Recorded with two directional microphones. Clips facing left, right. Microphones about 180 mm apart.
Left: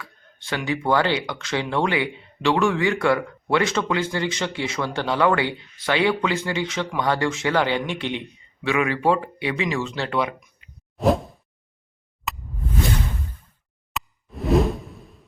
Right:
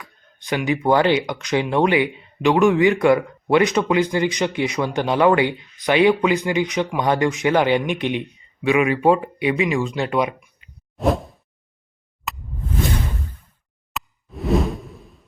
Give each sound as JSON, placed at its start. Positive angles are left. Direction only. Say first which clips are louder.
{"t": 0.0, "sound": "speech", "louder": "left 1 dB", "side_deg": -15}
{"t": 10.9, "sound": "whoosh", "louder": "even", "side_deg": 0}
{"t": 12.3, "sound": "a sound", "louder": "even", "side_deg": 0}
{"t": 13.9, "sound": "whoosh", "louder": "even", "side_deg": 0}